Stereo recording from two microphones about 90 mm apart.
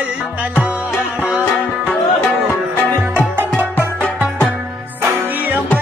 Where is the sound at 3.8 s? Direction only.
15° left (ahead or behind).